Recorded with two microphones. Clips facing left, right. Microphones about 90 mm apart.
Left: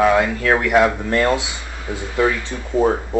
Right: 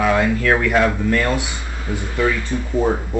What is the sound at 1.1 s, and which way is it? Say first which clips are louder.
Speech: left 1 dB; 25° left (ahead or behind).